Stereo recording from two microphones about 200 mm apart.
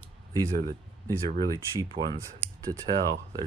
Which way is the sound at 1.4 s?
25° right (ahead or behind).